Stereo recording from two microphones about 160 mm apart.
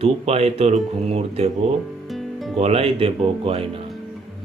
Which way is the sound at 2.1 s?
Centre (ahead or behind).